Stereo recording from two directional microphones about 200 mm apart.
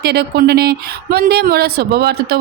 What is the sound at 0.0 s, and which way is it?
Speech, 55° right (ahead or behind).